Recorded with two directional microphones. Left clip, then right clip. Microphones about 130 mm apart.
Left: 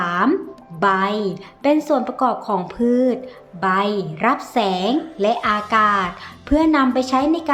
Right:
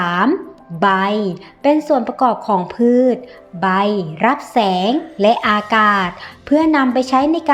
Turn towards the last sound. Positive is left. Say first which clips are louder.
# right 3 dB
turn(degrees=-25)  # may be behind; listen again after turning